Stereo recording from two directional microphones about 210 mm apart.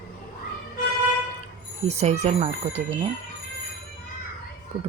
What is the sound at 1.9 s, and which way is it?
Speech, 30° right (ahead or behind).